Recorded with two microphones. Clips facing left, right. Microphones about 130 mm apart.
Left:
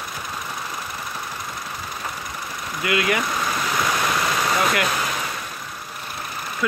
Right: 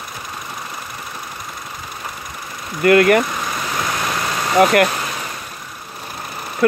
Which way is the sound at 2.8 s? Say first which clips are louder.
Right 11 dB; 50° right (ahead or behind).